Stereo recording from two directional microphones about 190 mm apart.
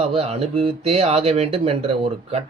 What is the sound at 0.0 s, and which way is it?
Speech, 35° right (ahead or behind).